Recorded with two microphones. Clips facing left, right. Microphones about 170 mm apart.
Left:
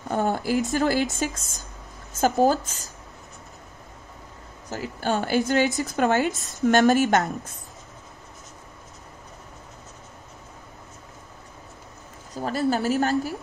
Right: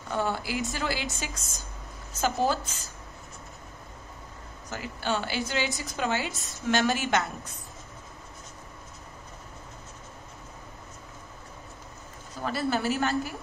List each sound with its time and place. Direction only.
0.1 s speech: 45° left (ahead or behind)
4.6 s speech: 35° left (ahead or behind)
5.7 s a woman's voice: centre (ahead or behind)
5.9 s speech: 55° left (ahead or behind)
12.4 s a woman's voice: 40° left (ahead or behind)